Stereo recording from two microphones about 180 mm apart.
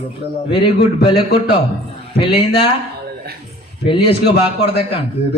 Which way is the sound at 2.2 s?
30° left (ahead or behind).